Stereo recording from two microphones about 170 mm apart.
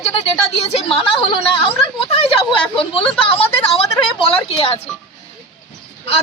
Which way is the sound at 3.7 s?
35° left (ahead or behind).